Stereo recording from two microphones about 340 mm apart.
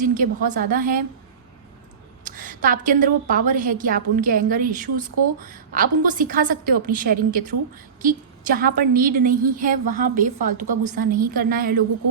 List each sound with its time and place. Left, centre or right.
0.0 s a woman's voice: right
2.2 s a woman's voice: right
10.2 s a woman's voice: right
10.8 s a woman's voice: right